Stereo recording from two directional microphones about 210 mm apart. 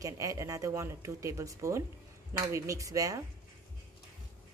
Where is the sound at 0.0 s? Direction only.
15° right (ahead or behind).